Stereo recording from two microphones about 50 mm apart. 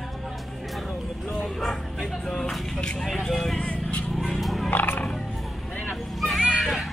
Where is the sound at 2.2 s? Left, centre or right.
Centre.